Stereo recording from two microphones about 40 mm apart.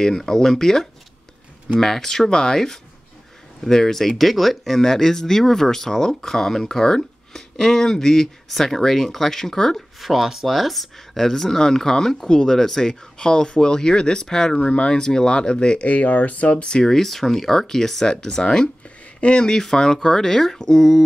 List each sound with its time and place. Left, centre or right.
0.0 s speech: centre
9.8 s speech: centre; by 15.9 s left
15.9 s speech: left
16.6 s speech: centre